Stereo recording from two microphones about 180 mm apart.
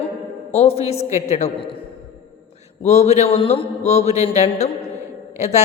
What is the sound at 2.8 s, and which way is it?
A woman's voice, 40° left (ahead or behind).